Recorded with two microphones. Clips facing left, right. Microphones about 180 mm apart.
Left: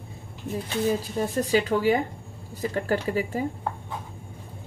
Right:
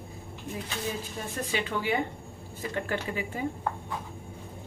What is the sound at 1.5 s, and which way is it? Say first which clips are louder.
A woman's voice: left 7 dB; 40° left (ahead or behind).